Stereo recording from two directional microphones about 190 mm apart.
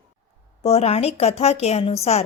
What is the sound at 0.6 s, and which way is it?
A woman's voice, 35° left (ahead or behind).